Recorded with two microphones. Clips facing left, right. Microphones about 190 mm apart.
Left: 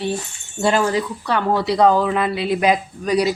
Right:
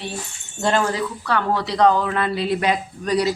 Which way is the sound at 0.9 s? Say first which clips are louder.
Left 2 dB; 20° left (ahead or behind).